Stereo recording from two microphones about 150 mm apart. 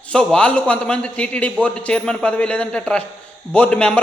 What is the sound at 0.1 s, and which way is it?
Speech, 5° left (ahead or behind).